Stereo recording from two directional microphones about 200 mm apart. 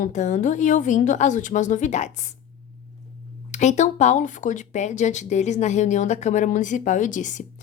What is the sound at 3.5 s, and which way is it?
Speech, 35° left (ahead or behind).